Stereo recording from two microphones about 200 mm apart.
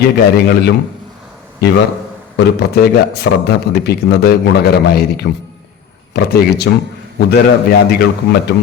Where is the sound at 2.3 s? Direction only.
55° left (ahead or behind).